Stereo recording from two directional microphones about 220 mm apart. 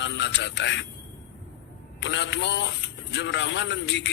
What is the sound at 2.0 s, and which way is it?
A man's voice, 55° left (ahead or behind).